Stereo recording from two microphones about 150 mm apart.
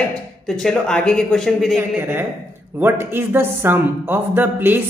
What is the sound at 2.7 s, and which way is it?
A man's voice, 15° right (ahead or behind).